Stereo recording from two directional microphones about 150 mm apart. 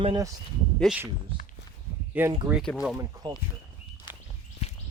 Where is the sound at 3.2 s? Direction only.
25° right (ahead or behind).